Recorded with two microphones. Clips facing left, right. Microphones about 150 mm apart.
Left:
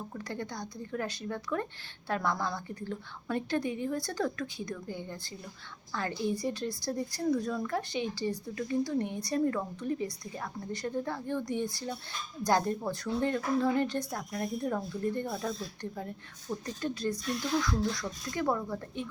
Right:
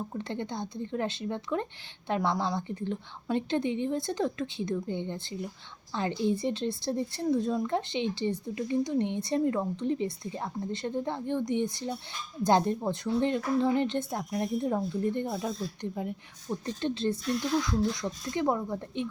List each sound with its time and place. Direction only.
0.1 s a woman's voice: 25° right (ahead or behind)